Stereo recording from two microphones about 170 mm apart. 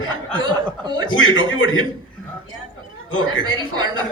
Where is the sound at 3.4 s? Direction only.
25° right (ahead or behind).